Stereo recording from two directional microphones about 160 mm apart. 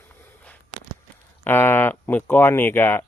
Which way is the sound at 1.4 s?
15° left (ahead or behind).